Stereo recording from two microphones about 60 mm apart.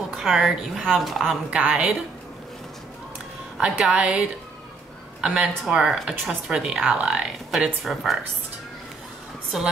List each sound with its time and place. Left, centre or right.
0.1 s speech: centre
1.5 s a woman's voice: right
3.5 s a woman's voice: centre
9.5 s speech: centre